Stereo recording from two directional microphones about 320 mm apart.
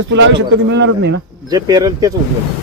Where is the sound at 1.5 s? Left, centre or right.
Centre.